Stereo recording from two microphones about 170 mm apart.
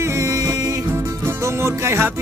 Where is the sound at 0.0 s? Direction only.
15° right (ahead or behind).